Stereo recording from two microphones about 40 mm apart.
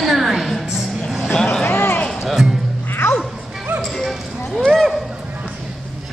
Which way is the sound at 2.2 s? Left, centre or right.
Centre.